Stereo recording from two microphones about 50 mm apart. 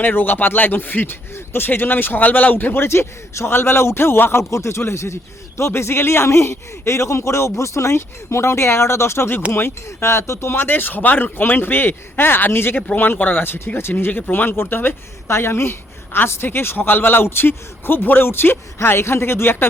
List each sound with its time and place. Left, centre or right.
0.0 s speech: left
2.9 s a man's voice: left
4.5 s a man's voice: left
7.9 s a man's voice: left
13.0 s speech: left